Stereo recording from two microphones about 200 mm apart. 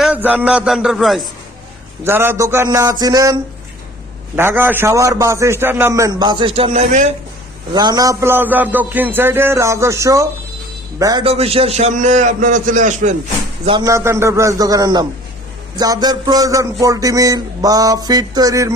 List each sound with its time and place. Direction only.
0.0 s a man's voice: 5° right (ahead or behind)
2.0 s a man's voice: 10° right (ahead or behind)
4.4 s a man's voice: 10° right (ahead or behind)
6.7 s a man's voice: 35° right (ahead or behind)
7.7 s a man's voice: 20° right (ahead or behind); by 13.1 s 40° right (ahead or behind)
13.7 s a man's voice: 20° right (ahead or behind)